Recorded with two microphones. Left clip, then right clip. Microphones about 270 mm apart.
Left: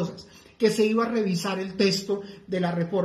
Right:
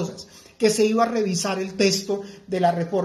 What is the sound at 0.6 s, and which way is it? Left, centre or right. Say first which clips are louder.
A woman's voice: right 3 dB; centre.